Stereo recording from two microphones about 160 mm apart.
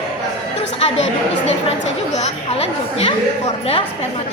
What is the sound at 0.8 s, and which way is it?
Chatter, 40° left (ahead or behind).